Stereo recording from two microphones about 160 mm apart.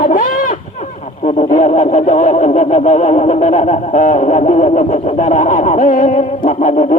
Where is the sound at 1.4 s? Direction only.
45° left (ahead or behind).